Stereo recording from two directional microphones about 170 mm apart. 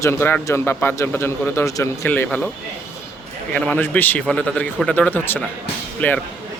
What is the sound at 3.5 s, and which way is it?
Speech, 10° left (ahead or behind).